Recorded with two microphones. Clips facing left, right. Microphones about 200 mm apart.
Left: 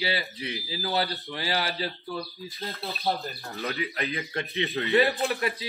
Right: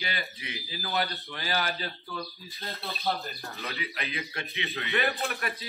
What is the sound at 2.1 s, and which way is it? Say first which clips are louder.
Speech: left 4 dB; 15° left (ahead or behind).